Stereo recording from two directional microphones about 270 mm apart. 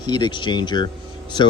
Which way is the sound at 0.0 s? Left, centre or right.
Centre.